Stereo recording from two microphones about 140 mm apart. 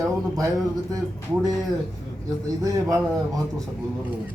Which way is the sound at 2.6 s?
25° right (ahead or behind).